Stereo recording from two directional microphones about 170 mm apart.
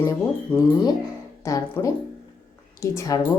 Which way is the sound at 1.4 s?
20° left (ahead or behind).